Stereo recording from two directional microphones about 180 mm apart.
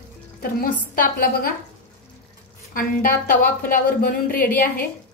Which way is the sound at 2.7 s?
50° left (ahead or behind).